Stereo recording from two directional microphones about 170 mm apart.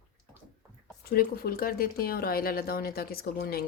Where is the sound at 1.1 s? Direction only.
60° left (ahead or behind).